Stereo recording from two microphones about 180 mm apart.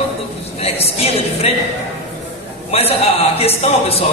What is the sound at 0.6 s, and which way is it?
Speech, 35° left (ahead or behind).